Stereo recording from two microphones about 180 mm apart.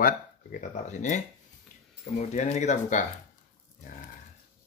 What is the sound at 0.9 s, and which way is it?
Speech, 40° left (ahead or behind).